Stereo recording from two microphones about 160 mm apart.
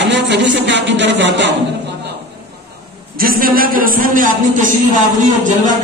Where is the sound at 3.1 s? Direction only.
65° right (ahead or behind).